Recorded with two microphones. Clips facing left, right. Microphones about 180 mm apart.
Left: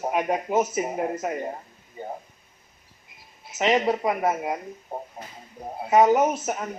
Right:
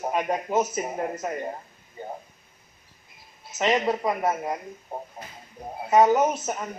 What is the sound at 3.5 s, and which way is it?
A man's voice, 15° left (ahead or behind).